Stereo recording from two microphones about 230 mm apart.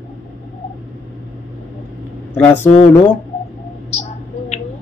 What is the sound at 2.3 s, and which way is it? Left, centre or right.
Speech, centre.